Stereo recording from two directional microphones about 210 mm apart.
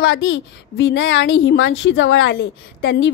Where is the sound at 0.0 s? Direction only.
65° left (ahead or behind).